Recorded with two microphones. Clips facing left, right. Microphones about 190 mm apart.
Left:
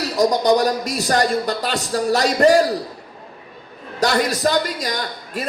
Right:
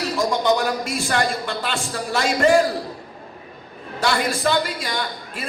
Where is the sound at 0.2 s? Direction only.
40° left (ahead or behind).